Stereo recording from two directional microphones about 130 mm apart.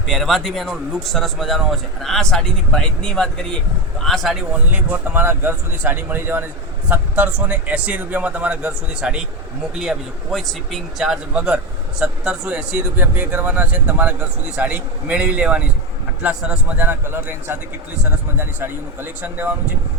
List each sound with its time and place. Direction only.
0.1 s speech: centre (ahead or behind)
4.5 s a man's voice: 15° right (ahead or behind)